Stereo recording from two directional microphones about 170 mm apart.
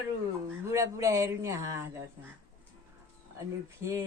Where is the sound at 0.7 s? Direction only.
15° right (ahead or behind).